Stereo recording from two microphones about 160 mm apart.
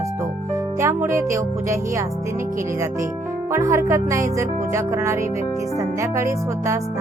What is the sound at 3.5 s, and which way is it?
Music, 20° right (ahead or behind).